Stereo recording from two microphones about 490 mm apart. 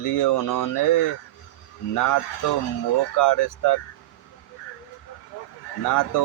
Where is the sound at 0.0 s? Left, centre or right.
Left.